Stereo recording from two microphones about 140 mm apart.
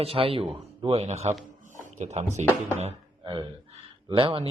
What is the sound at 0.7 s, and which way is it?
Speech, 45° right (ahead or behind).